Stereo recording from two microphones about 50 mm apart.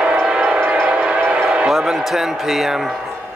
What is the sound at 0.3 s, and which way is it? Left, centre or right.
Train, centre.